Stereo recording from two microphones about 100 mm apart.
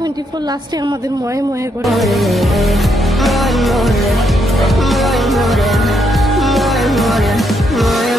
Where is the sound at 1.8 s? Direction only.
Centre (ahead or behind).